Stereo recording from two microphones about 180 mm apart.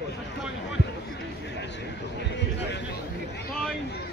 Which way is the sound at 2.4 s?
75° left (ahead or behind).